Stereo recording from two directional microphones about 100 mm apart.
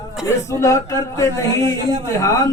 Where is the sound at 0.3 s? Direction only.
30° left (ahead or behind).